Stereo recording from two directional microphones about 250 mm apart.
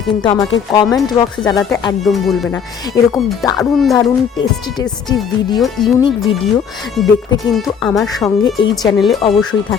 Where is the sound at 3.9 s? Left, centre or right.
Centre.